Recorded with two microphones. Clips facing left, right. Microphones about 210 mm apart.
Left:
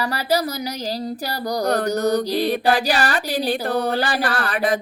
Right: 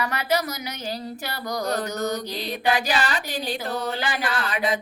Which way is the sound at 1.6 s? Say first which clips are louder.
Left 6 dB; 60° left (ahead or behind).